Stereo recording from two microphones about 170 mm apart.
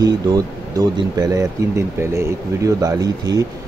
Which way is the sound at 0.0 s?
20° right (ahead or behind).